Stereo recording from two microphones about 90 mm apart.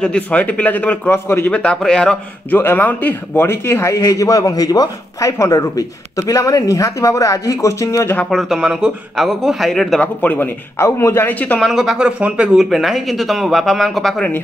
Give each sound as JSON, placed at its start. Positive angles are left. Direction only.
{"t": 0.0, "sound": "speech", "side_deg": 15}
{"t": 1.5, "sound": "speech", "side_deg": 10}
{"t": 2.5, "sound": "a man's voice", "side_deg": 20}
{"t": 8.0, "sound": "speech", "side_deg": 25}
{"t": 8.3, "sound": "speech", "side_deg": 0}
{"t": 9.9, "sound": "speech", "side_deg": 20}
{"t": 11.6, "sound": "speech", "side_deg": 0}
{"t": 12.0, "sound": "speech", "side_deg": -15}
{"t": 12.5, "sound": "speech", "side_deg": 0}